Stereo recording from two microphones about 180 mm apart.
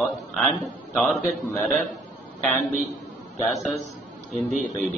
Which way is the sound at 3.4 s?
Centre (ahead or behind).